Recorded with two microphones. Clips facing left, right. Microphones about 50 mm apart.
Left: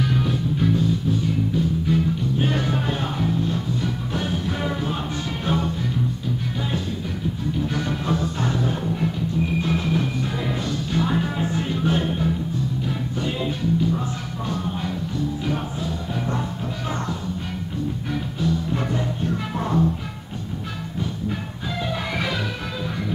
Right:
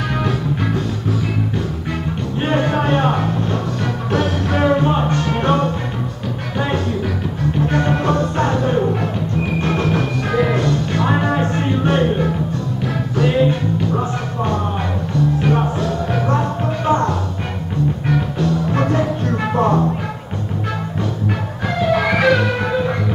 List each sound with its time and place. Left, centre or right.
0.1 s music: right
2.0 s music: right
7.6 s music: right
10.6 s music: right
13.5 s music: right
15.1 s music: right
16.8 s music: right
18.0 s music: right
21.9 s music: right